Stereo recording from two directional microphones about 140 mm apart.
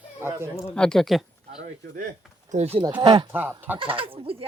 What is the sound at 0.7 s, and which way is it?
Speech, 5° left (ahead or behind).